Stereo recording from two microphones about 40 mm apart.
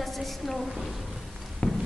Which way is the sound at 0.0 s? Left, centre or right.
Centre.